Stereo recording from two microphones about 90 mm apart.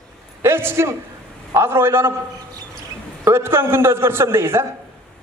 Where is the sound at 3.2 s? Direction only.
25° right (ahead or behind).